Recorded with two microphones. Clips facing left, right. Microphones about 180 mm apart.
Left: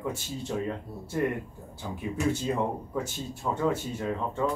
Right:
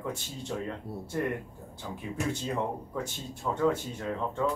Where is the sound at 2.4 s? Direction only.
5° left (ahead or behind).